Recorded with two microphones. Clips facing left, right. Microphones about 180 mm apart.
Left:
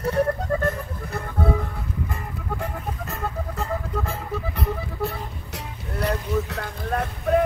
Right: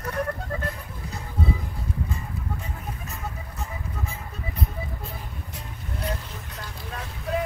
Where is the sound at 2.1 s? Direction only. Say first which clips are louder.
Left 2 dB; 75° left (ahead or behind); by 7.4 s 55° left (ahead or behind).